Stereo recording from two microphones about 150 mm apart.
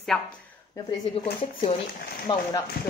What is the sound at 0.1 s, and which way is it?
Speech, 5° left (ahead or behind).